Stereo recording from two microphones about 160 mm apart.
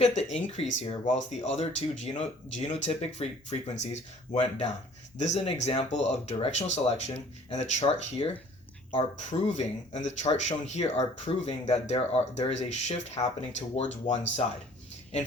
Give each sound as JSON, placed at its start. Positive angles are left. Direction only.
{"t": 0.0, "sound": "speech", "side_deg": 45}